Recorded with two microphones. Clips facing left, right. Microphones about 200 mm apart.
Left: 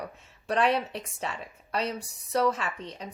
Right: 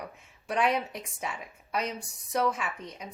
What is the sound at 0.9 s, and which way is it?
A woman's voice, 10° right (ahead or behind).